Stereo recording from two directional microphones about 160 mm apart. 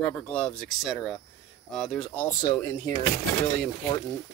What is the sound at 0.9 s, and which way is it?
Speech, 5° right (ahead or behind).